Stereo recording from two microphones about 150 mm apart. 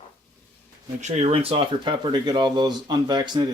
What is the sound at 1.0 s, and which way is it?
Speech, 50° right (ahead or behind).